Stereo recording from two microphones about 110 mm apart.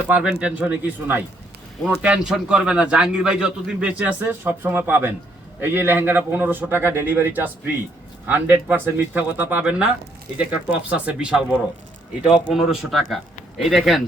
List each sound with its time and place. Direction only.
0.1 s a man's voice: 5° right (ahead or behind)